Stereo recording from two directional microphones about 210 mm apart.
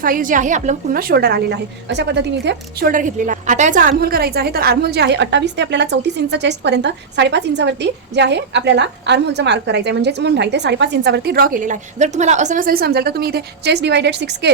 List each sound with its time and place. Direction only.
0.0 s a woman's voice: 40° right (ahead or behind)
2.9 s a woman's voice: 40° right (ahead or behind); by 14.5 s 55° right (ahead or behind)